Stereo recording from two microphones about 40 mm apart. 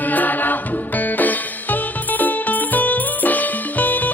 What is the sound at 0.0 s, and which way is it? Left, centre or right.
Music, left.